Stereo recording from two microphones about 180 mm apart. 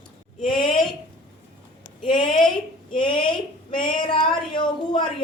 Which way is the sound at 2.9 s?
25° left (ahead or behind).